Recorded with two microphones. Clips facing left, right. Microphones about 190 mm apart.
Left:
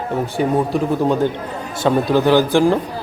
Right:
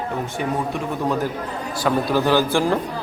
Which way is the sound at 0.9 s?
30° left (ahead or behind).